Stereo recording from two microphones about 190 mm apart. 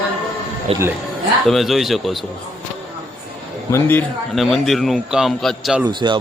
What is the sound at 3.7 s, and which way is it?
A man's voice, 10° left (ahead or behind).